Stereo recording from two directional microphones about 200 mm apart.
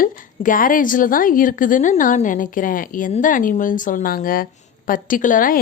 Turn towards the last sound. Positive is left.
turn(degrees=40)  # may be behind; listen again after turning